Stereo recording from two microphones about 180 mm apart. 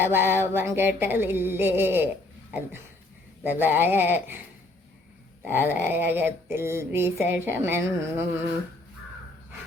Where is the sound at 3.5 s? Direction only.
10° right (ahead or behind).